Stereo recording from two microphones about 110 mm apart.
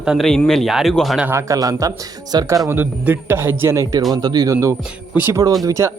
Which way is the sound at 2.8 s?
20° right (ahead or behind).